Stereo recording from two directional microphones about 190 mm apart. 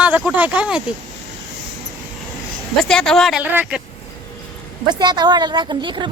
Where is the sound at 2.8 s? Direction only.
5° left (ahead or behind).